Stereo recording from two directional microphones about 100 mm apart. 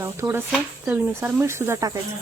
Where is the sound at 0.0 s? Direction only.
25° right (ahead or behind).